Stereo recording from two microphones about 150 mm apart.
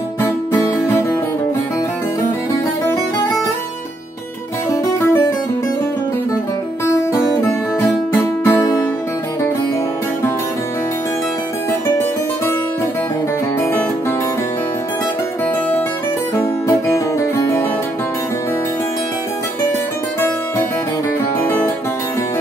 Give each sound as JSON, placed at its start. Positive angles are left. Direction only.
{"t": 0.6, "sound": "music", "side_deg": 20}
{"t": 7.8, "sound": "music", "side_deg": 15}
{"t": 16.3, "sound": "music", "side_deg": 20}